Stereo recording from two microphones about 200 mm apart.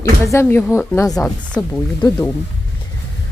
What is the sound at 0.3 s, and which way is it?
Speech, 15° left (ahead or behind).